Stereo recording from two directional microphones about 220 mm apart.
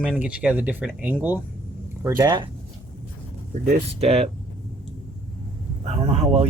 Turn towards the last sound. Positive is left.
turn(degrees=-30)  # may be behind; listen again after turning